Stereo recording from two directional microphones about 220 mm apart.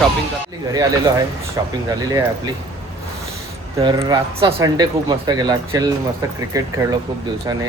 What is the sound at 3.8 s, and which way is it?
Speech, 20° right (ahead or behind).